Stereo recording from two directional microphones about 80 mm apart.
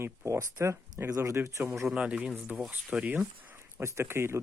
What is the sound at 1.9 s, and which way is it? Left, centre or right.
Speech, centre.